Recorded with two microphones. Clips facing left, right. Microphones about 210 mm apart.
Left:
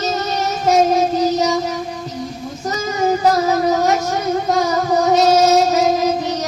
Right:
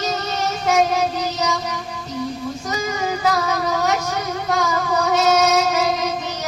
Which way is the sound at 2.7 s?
40° left (ahead or behind).